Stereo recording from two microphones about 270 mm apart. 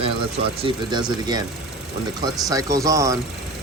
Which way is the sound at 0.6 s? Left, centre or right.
Centre.